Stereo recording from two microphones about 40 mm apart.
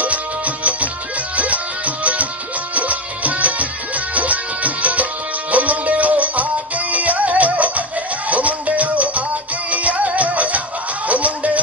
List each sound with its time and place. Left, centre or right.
0.0 s music: right